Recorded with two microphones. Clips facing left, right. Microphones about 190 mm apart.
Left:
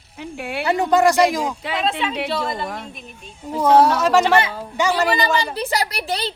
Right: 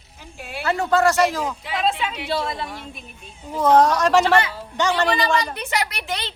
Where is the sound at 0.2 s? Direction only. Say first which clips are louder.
Left 8 dB; 65° left (ahead or behind).